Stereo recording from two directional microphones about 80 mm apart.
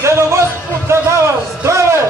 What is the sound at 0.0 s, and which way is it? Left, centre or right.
Music, right.